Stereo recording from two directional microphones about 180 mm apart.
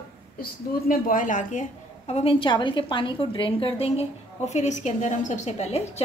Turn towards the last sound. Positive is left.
turn(degrees=35)  # may be behind; listen again after turning